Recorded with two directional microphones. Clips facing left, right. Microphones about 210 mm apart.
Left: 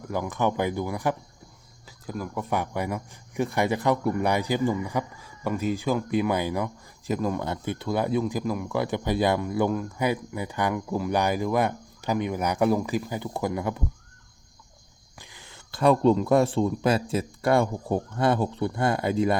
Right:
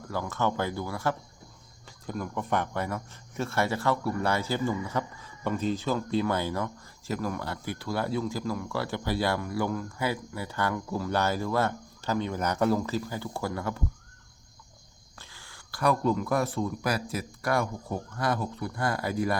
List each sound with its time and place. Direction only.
0.1 s speech: 15° left (ahead or behind)
1.9 s speech: 5° left (ahead or behind)
15.2 s speech: 20° left (ahead or behind)